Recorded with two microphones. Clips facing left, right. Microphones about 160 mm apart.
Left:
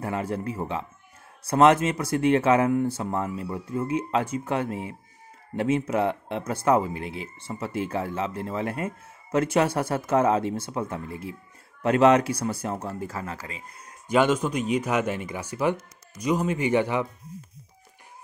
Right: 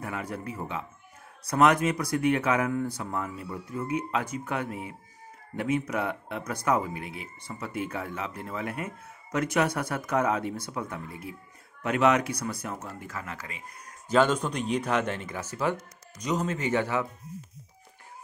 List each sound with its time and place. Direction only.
0.0 s speech: 30° left (ahead or behind)
14.0 s speech: 10° left (ahead or behind)